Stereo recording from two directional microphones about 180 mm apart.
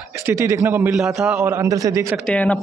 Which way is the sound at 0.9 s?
Centre (ahead or behind).